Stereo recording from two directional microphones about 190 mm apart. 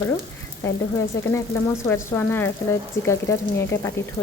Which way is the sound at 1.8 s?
10° left (ahead or behind).